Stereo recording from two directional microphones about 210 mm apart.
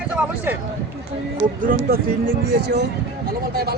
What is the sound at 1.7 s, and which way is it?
Speech, 45° right (ahead or behind).